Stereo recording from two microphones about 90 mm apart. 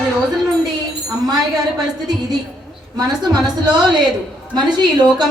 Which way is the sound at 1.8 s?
50° right (ahead or behind).